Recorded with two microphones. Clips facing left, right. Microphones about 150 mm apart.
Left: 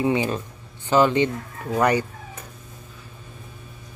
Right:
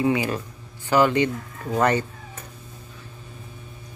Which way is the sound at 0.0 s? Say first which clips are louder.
Even; 25° left (ahead or behind).